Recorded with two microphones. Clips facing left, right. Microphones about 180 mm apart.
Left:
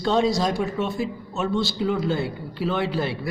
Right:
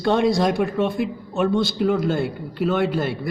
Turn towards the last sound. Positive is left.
turn(degrees=-50)  # may be behind; listen again after turning